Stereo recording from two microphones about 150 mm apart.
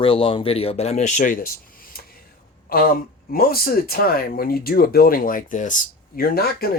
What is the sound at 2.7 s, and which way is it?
Speech, 80° left.